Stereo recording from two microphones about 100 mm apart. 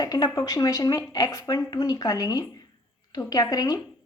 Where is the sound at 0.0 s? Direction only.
40° left (ahead or behind).